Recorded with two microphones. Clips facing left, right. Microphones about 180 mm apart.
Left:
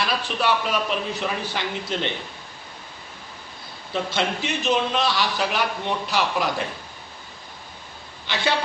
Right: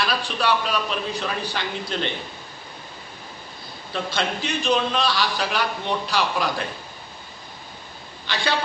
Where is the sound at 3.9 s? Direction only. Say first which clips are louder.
Left 1 dB; 20° left (ahead or behind).